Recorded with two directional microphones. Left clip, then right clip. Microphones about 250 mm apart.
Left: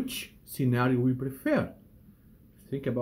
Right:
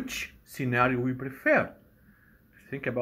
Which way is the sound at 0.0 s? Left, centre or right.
Centre.